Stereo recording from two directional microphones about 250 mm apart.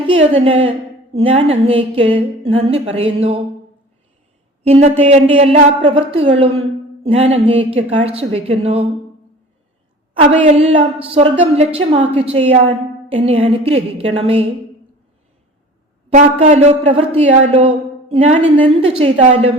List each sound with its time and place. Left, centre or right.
0.1 s speech: right
4.6 s a woman's voice: right
10.2 s speech: right
16.1 s speech: right